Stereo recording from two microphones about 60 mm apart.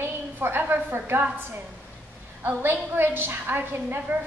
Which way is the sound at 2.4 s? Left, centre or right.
Right.